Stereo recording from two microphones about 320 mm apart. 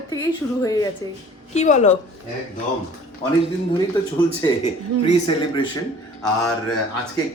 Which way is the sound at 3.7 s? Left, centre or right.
Centre.